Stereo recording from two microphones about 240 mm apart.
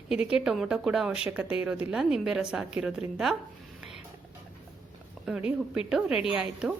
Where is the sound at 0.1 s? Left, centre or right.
Centre.